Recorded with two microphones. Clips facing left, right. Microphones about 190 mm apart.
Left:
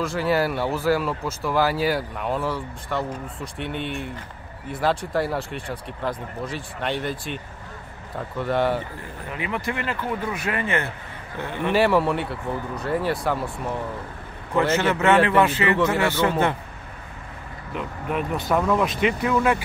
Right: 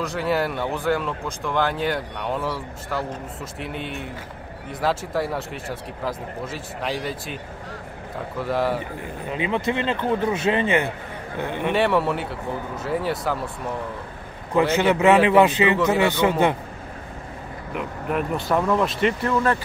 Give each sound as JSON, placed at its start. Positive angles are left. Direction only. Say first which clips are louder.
{"t": 0.0, "sound": "speech", "louder": "left 1 dB", "side_deg": 0}
{"t": 8.4, "sound": "speech", "louder": "left 1 dB", "side_deg": 0}
{"t": 9.2, "sound": "a man's voice", "louder": "right 4 dB", "side_deg": -20}
{"t": 11.7, "sound": "a man's voice", "louder": "left 2 dB", "side_deg": 0}
{"t": 14.8, "sound": "a man's voice", "louder": "right 3 dB", "side_deg": -15}
{"t": 17.7, "sound": "speech", "louder": "right 1 dB", "side_deg": 0}